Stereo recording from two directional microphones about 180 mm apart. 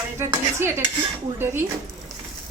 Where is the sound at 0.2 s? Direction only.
15° right (ahead or behind).